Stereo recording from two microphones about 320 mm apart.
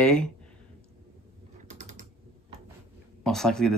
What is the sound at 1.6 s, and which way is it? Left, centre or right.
Typing, right.